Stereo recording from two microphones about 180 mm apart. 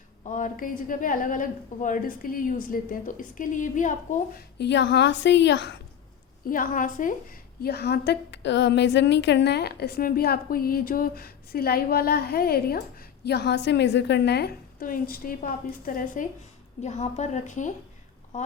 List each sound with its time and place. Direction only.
0.3 s a woman's voice: 45° left (ahead or behind)
4.5 s a woman's voice: 75° left (ahead or behind)
6.5 s a woman's voice: 50° left (ahead or behind)
16.8 s a woman's voice: 40° left (ahead or behind)